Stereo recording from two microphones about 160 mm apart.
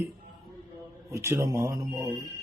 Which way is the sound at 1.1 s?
15° right (ahead or behind).